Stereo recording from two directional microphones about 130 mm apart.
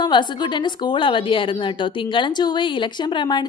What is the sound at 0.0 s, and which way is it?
A woman's voice, 35° left (ahead or behind).